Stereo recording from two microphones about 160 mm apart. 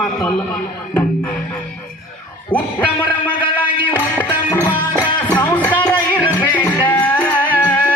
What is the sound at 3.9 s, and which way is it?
Music, 10° left (ahead or behind).